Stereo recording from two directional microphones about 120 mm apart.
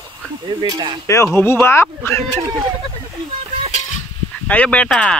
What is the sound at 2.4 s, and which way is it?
Speech, 30° right (ahead or behind).